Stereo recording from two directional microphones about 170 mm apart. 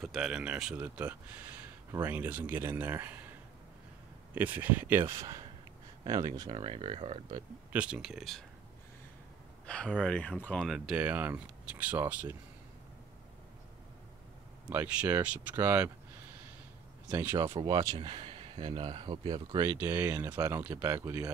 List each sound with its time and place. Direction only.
0.0 s speech: 5° right (ahead or behind)
4.4 s speech: 10° right (ahead or behind); by 7.3 s 40° right (ahead or behind)
7.7 s speech: 5° right (ahead or behind)
9.7 s speech: 5° left (ahead or behind)
14.7 s speech: 10° right (ahead or behind)
17.4 s speech: 25° right (ahead or behind)